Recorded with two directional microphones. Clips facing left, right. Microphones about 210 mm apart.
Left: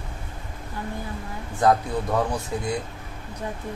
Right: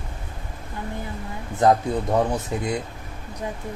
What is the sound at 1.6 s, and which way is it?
Speech, 20° right (ahead or behind).